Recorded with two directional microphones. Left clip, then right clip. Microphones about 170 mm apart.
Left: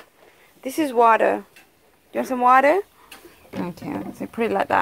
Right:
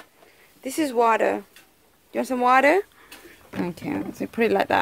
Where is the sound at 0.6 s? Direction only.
Centre (ahead or behind).